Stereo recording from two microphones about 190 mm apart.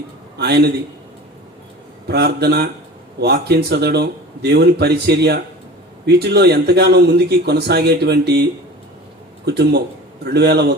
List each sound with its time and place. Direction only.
0.3 s speech: 60° right (ahead or behind)
2.0 s speech: 60° right (ahead or behind)
9.5 s speech: 60° right (ahead or behind)